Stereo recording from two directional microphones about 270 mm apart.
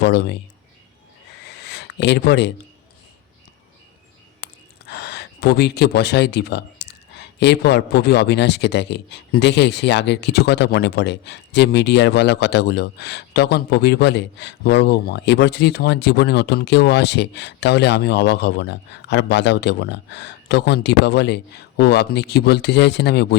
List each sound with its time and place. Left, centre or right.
0.0 s speech: left
1.6 s a sound: left
4.4 s gasp: left
4.9 s speech: left